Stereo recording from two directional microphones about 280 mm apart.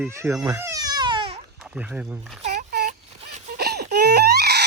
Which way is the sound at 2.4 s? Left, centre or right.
Right.